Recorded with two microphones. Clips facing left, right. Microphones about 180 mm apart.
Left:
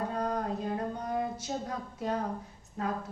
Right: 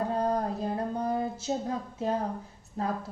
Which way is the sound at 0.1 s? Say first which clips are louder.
Right 4 dB; 30° right (ahead or behind).